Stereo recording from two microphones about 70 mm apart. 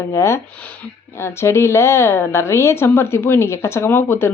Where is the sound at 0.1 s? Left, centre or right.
Left.